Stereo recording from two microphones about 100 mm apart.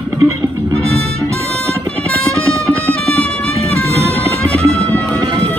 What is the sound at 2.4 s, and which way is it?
Music, 30° right (ahead or behind).